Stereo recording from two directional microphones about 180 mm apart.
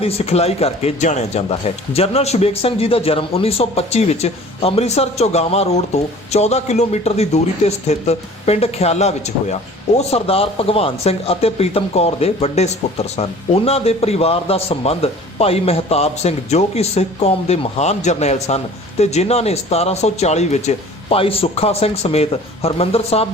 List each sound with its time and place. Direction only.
0.0 s speech: 35° left (ahead or behind)